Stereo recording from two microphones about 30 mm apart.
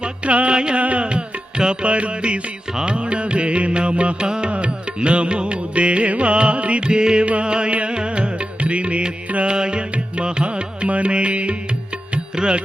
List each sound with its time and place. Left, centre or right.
0.0 s music: right
0.5 s music: right
0.8 s music: right
1.9 s music: right
6.8 s music: right
12.4 s music: right